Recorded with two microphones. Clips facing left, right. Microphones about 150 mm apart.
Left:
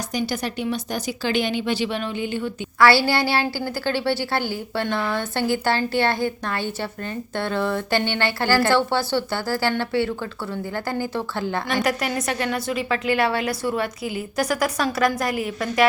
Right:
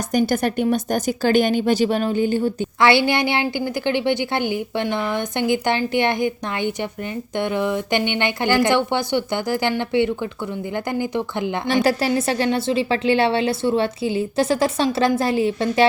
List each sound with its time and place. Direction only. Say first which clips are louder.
0.1 s a woman's voice: right 9 dB; 50° right (ahead or behind)
2.8 s a woman's voice: right 1 dB; 20° right (ahead or behind)
11.8 s a woman's voice: right 7 dB; 30° right (ahead or behind)